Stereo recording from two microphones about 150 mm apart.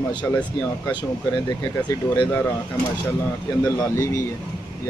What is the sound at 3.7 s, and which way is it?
Speech, 20° left (ahead or behind).